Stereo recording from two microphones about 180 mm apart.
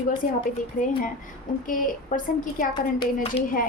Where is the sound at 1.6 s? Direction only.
50° left (ahead or behind).